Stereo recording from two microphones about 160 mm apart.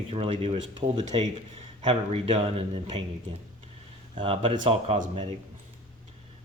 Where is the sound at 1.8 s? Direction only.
35° right (ahead or behind).